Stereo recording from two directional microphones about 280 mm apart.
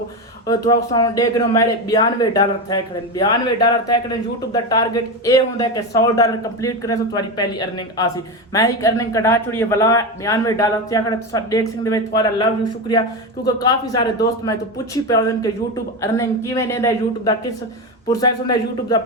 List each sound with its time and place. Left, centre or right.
0.7 s speech: centre